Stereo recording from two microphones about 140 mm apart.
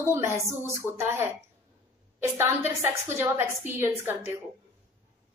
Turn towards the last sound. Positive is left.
turn(degrees=-15)  # may be behind; listen again after turning